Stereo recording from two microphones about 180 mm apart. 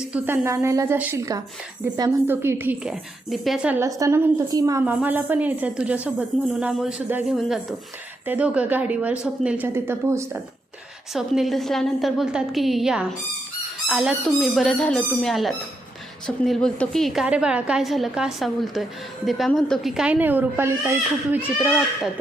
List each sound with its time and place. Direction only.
0.1 s a woman's voice: 15° right (ahead or behind)
11.1 s a woman's voice: centre (ahead or behind)
21.6 s a woman's voice: centre (ahead or behind)